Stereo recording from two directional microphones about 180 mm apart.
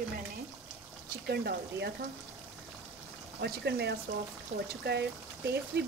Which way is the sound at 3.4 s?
65° right (ahead or behind).